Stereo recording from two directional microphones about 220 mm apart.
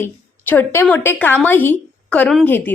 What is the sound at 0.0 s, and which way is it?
A woman's voice, 10° left (ahead or behind).